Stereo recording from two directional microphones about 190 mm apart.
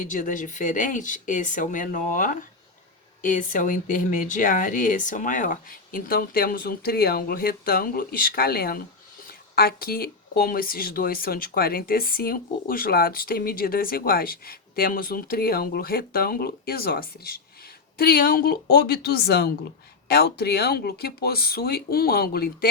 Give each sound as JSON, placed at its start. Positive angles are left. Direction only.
{"t": 0.0, "sound": "speech", "side_deg": 45}